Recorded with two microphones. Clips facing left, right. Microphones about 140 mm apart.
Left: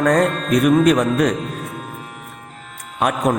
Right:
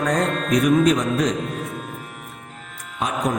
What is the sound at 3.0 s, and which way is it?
Speech, 65° left (ahead or behind).